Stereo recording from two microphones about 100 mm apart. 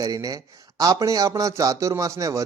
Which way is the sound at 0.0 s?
35° right (ahead or behind).